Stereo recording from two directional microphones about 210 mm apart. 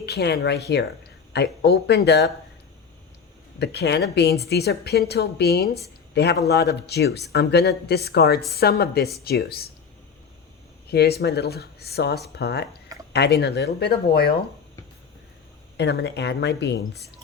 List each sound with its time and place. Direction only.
0.0 s a woman's voice: 50° left (ahead or behind)
3.6 s a woman's voice: 50° left (ahead or behind)
10.9 s a woman's voice: 50° left (ahead or behind)
15.8 s a woman's voice: 50° left (ahead or behind)